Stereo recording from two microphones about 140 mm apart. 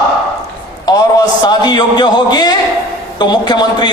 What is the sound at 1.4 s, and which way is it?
Speech, 30° left (ahead or behind).